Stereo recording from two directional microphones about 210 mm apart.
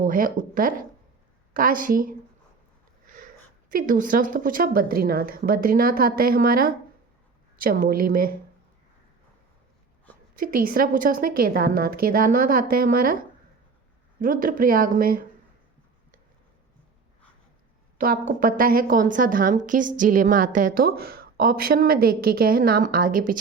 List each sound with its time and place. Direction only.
0.0 s a woman's voice: 40° right (ahead or behind)
3.7 s a woman's voice: 40° right (ahead or behind)
10.4 s a woman's voice: 40° right (ahead or behind)
14.2 s a woman's voice: 40° right (ahead or behind)
17.9 s a woman's voice: 40° right (ahead or behind)